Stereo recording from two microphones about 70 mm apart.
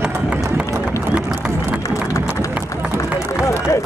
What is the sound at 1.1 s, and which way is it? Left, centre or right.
Crowd, centre.